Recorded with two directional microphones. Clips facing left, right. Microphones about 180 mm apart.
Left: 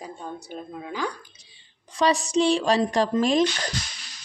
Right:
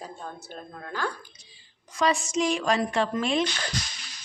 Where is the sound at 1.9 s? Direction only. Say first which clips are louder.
Left 4 dB; 35° left (ahead or behind).